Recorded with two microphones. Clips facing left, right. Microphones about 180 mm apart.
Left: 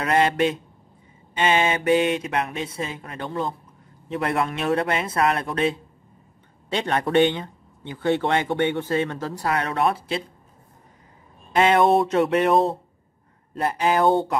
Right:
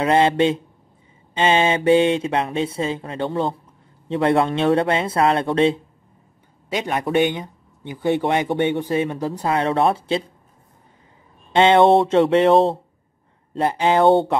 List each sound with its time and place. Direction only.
0.0 s speech: 25° right (ahead or behind)
6.7 s speech: 10° right (ahead or behind); by 10.2 s 30° right (ahead or behind)
11.5 s speech: 25° right (ahead or behind)